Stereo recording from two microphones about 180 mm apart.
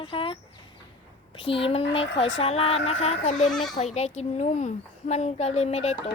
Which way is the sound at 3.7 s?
40° left (ahead or behind).